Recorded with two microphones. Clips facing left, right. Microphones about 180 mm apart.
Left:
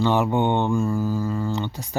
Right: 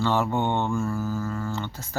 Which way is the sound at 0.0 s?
15° left (ahead or behind).